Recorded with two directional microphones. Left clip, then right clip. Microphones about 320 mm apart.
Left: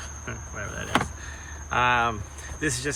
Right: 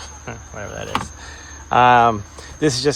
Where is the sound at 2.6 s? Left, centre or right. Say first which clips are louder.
Right 10 dB; centre.